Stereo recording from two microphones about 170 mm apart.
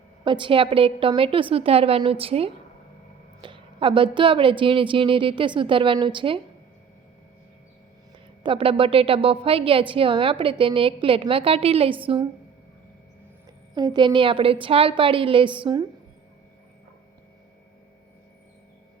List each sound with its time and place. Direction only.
0.3 s a woman's voice: 30° right (ahead or behind)
8.4 s a woman's voice: 30° right (ahead or behind)
13.7 s a woman's voice: 25° right (ahead or behind)